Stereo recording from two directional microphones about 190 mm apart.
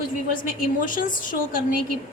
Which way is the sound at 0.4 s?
45° left (ahead or behind).